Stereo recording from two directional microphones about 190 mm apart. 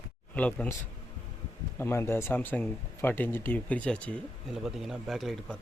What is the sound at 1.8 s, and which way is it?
Speech, 15° left (ahead or behind).